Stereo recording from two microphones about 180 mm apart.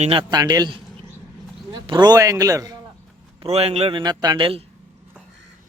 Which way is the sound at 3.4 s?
35° right (ahead or behind).